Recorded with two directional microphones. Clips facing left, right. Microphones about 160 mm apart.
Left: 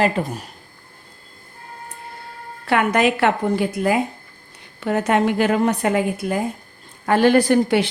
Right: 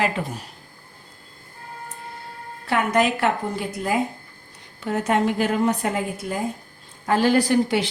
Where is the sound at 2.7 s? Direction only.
70° left (ahead or behind).